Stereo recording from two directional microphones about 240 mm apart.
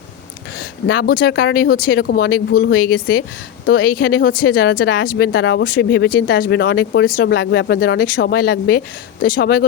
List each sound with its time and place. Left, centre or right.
0.6 s speech: left